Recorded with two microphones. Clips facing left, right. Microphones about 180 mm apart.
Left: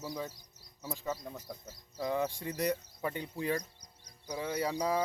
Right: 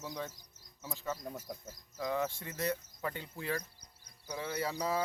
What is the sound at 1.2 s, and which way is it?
Speech, 10° right (ahead or behind).